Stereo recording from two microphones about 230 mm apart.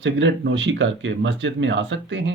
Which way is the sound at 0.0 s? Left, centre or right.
Right.